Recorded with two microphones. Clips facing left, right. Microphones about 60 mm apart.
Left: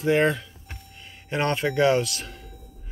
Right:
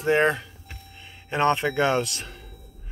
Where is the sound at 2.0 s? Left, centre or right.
Right.